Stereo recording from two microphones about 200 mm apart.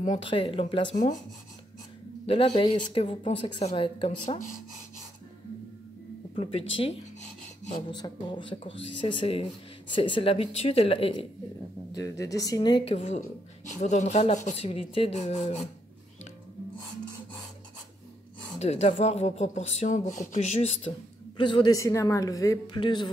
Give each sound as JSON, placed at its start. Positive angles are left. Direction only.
{"t": 0.0, "sound": "speech", "side_deg": 35}
{"t": 0.3, "sound": "speech", "side_deg": 25}
{"t": 2.2, "sound": "speech", "side_deg": 30}
{"t": 6.3, "sound": "speech", "side_deg": 30}
{"t": 7.9, "sound": "speech", "side_deg": 20}
{"t": 11.9, "sound": "speech", "side_deg": 15}
{"t": 18.6, "sound": "speech", "side_deg": 35}